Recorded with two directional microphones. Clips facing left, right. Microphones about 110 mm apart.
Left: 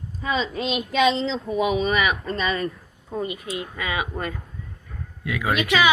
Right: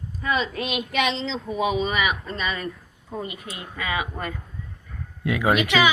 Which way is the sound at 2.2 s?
35° left (ahead or behind).